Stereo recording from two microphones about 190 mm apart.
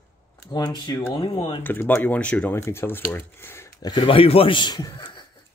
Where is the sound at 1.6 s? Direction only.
10° left (ahead or behind).